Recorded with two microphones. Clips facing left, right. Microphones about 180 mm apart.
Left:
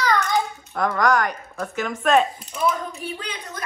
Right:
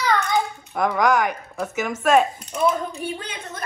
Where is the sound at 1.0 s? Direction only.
15° right (ahead or behind).